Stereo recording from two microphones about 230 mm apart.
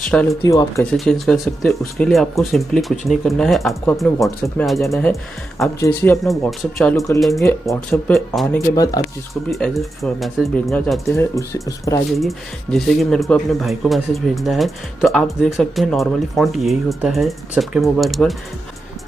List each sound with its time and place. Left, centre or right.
0.0 s speech: centre
0.4 s speech: centre
0.9 s speech: centre
8.7 s speech: centre
9.3 s speech: centre
11.1 s speech: centre
12.1 s speech: centre